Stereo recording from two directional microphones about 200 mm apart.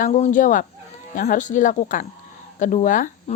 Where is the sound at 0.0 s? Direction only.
40° left (ahead or behind).